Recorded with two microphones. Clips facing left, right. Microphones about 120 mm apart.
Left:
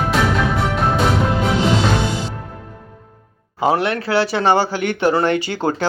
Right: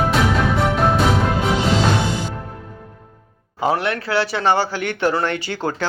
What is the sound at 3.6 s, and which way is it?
Speech, 20° left (ahead or behind).